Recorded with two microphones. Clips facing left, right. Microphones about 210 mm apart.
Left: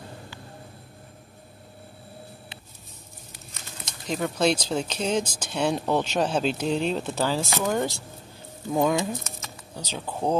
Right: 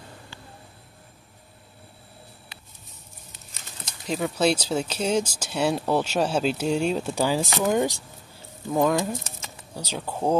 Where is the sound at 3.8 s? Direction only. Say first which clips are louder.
Right 1 dB; 5° right (ahead or behind).